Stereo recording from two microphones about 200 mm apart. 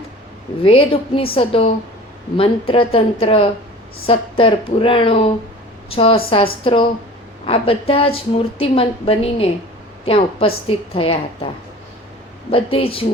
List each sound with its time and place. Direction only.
0.6 s a woman's voice: 25° left (ahead or behind)
12.5 s a woman's voice: 25° left (ahead or behind)